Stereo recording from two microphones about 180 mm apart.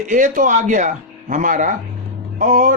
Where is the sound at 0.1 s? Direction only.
45° right (ahead or behind).